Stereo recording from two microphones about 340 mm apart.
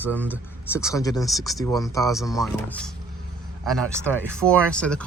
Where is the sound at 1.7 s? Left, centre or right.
Centre.